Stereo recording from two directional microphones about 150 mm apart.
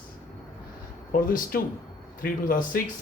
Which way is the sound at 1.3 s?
75° left (ahead or behind).